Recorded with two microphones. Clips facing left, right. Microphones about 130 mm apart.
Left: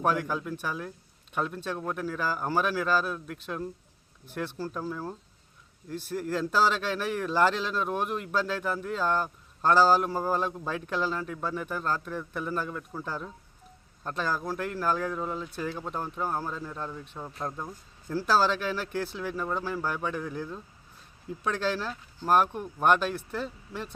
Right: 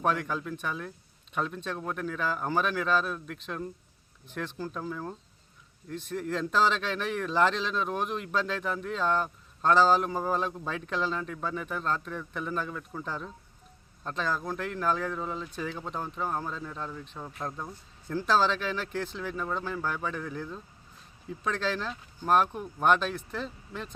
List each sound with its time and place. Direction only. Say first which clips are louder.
0.0 s a man's voice: left 1 dB; 5° left (ahead or behind)